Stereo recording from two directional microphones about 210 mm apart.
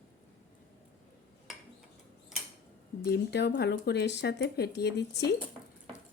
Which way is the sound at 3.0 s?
50° left (ahead or behind).